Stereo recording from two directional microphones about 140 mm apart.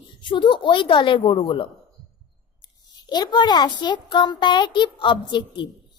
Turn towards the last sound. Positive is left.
turn(degrees=35)  # may be behind; listen again after turning